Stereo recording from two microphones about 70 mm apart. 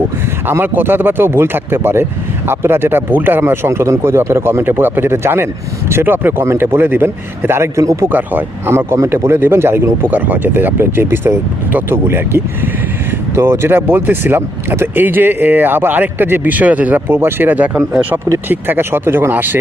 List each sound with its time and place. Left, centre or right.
0.4 s speech: right
8.1 s speech: right
8.7 s speech: right